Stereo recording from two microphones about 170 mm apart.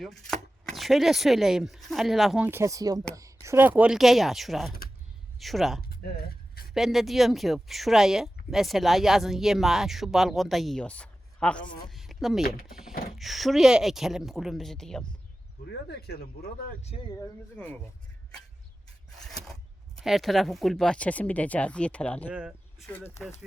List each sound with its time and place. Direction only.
0.0 s speech: centre (ahead or behind)
2.5 s speech: 15° right (ahead or behind); by 5.8 s centre (ahead or behind)
6.0 s speech: 65° left (ahead or behind)
6.7 s speech: centre (ahead or behind)
15.9 s speech: 70° left (ahead or behind)
17.6 s speech: 5° left (ahead or behind)
20.0 s speech: centre (ahead or behind)
22.3 s speech: 5° right (ahead or behind)
22.9 s speech: 15° left (ahead or behind)